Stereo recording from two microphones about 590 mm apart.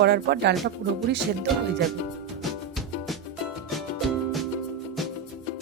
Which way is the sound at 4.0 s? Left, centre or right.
Centre.